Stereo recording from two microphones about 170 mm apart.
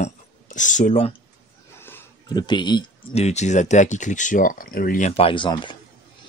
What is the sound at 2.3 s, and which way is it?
Speech, 25° left (ahead or behind).